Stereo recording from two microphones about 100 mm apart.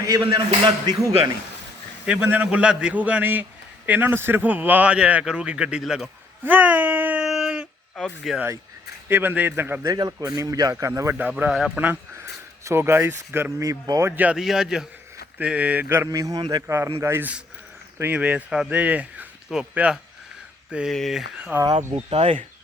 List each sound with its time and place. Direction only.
0.0 s speech: 40° right (ahead or behind)
2.2 s a man's voice: 15° right (ahead or behind)
5.8 s speech: centre (ahead or behind)
6.4 s a sound: 20° right (ahead or behind)
7.3 s a sound: centre (ahead or behind)
8.2 s speech: centre (ahead or behind)
9.0 s a man's voice: 20° right (ahead or behind)
9.8 s speech: 40° right (ahead or behind)
11.2 s a man's voice: 15° right (ahead or behind)
12.1 s speech: 25° right (ahead or behind)
13.7 s speech: 35° right (ahead or behind)
14.2 s a man's voice: 15° right (ahead or behind)
16.0 s a man's voice: 35° right (ahead or behind); by 21.5 s 5° right (ahead or behind)
21.9 s speech: 90° right